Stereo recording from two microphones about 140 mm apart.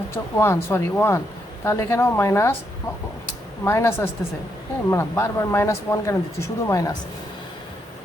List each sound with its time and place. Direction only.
0.1 s speech: 20° left (ahead or behind)
3.6 s speech: 20° left (ahead or behind)